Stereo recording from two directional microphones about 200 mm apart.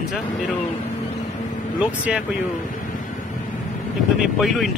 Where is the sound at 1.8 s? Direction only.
5° right (ahead or behind).